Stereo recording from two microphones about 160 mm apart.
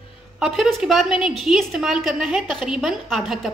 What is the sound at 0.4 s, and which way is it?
A woman's voice, centre (ahead or behind).